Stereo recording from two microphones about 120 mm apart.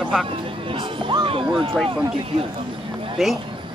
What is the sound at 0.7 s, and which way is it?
Speech, 50° right (ahead or behind).